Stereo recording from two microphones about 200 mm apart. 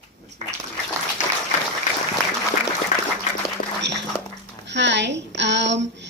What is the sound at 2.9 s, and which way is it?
Applause, 40° left (ahead or behind).